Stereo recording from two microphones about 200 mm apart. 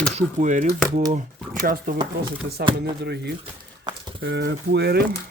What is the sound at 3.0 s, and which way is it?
Speech, 55° right (ahead or behind).